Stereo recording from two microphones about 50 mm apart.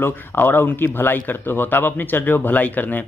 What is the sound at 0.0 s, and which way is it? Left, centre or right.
A man's voice, left.